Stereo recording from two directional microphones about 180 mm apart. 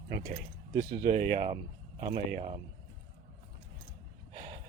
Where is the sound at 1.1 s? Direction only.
25° right (ahead or behind).